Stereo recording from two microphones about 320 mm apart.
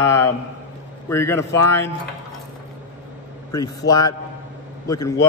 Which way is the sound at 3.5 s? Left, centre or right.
Centre.